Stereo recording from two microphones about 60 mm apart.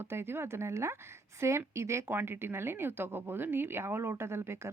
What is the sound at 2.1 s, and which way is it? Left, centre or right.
Speech, right.